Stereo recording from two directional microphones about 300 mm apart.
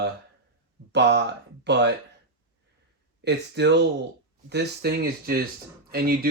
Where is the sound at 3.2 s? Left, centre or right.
Right.